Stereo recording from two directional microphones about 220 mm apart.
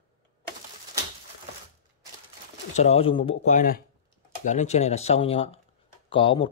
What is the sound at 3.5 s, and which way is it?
Speech, 40° left (ahead or behind).